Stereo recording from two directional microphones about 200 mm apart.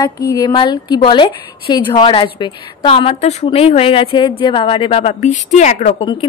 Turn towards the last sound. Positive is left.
turn(degrees=25)  # may be behind; listen again after turning